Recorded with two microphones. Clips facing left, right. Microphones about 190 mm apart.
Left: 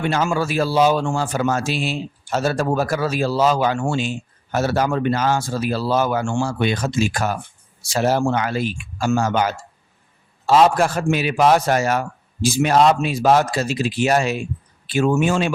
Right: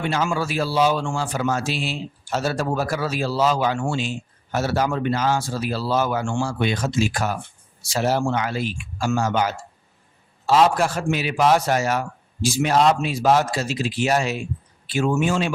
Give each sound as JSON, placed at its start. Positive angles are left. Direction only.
{"t": 0.0, "sound": "speech", "side_deg": 45}